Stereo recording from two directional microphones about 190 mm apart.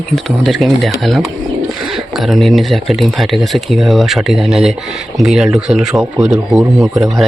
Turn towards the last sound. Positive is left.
turn(degrees=-15)  # may be behind; listen again after turning